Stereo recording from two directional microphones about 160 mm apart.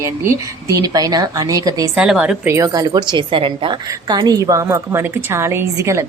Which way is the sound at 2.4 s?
20° right (ahead or behind).